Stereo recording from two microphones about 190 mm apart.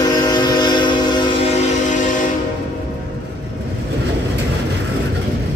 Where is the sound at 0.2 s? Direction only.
20° left (ahead or behind).